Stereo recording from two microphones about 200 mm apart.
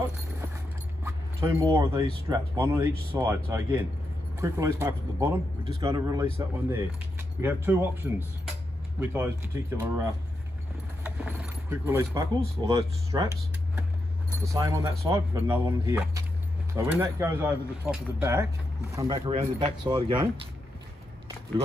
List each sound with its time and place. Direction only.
1.0 s speech: 15° right (ahead or behind)
14.4 s speech: 15° right (ahead or behind)
19.0 s speech: 25° right (ahead or behind)